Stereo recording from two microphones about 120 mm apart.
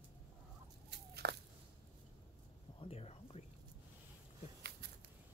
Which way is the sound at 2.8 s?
55° left (ahead or behind).